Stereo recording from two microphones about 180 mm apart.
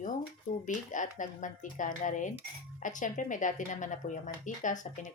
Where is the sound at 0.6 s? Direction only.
45° left (ahead or behind).